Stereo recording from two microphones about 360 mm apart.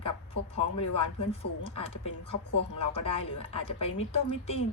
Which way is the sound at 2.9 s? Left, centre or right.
Centre.